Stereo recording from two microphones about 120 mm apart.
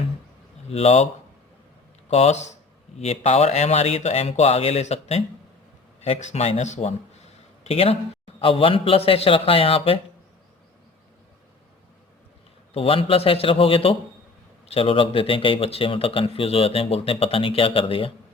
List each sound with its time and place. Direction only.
0.7 s speech: 60° left (ahead or behind)
2.0 s speech: 65° left (ahead or behind)
3.0 s speech: 60° left (ahead or behind)
7.6 s speech: 55° left (ahead or behind)
12.7 s speech: 50° left (ahead or behind)